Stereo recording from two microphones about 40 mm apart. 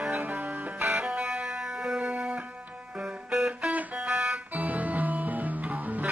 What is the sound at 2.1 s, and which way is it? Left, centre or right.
Music, right.